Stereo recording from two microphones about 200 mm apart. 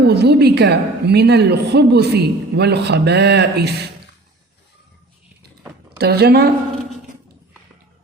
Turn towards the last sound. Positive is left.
turn(degrees=-55)  # may be behind; listen again after turning